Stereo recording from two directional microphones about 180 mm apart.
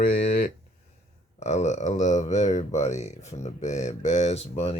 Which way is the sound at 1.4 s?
40° left (ahead or behind).